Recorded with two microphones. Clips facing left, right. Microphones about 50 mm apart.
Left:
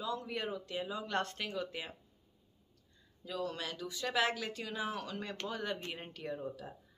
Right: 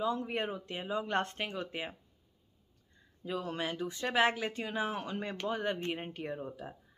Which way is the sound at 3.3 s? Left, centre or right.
Right.